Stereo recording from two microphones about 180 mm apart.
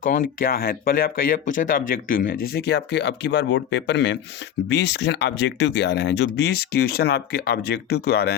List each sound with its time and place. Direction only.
0.0 s speech: 45° left (ahead or behind); by 8.4 s 65° left (ahead or behind)